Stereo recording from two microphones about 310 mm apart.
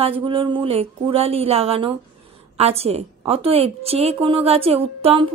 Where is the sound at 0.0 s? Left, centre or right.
Centre.